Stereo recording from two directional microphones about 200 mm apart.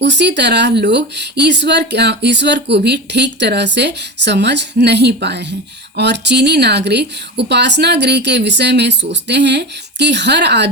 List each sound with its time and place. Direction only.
0.0 s speech: 60° right (ahead or behind)